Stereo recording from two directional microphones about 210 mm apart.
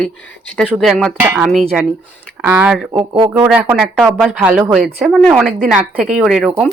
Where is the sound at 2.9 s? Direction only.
25° right (ahead or behind).